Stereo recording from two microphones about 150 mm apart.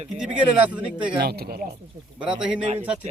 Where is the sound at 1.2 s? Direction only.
90° right.